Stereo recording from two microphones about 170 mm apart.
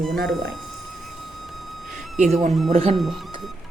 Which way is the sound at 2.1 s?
45° right (ahead or behind).